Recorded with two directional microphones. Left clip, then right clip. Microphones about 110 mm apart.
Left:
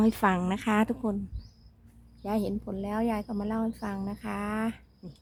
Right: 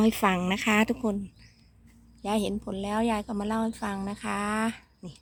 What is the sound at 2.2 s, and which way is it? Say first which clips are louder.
A woman's voice: right 2 dB; 30° right (ahead or behind).